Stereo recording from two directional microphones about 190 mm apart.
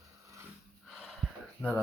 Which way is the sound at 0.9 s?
Centre (ahead or behind).